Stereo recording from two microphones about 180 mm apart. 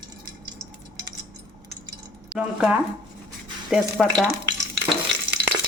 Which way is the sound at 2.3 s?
5° right (ahead or behind).